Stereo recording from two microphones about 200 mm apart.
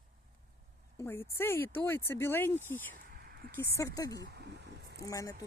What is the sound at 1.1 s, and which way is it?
Speech, 10° left (ahead or behind).